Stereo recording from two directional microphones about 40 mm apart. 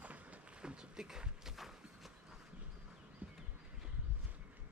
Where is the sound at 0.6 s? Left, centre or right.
Right; by 2.1 s centre.